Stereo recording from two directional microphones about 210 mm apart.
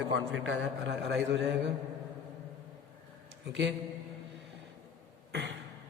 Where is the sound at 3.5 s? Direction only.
60° right (ahead or behind).